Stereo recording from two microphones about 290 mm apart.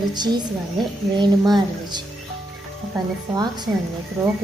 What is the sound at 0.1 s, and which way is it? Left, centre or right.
A woman's voice, centre.